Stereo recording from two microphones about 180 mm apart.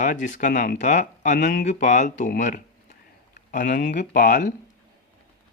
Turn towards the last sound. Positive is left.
turn(degrees=50)  # may be behind; listen again after turning